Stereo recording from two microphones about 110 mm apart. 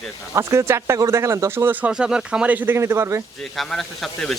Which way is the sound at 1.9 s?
5° right (ahead or behind).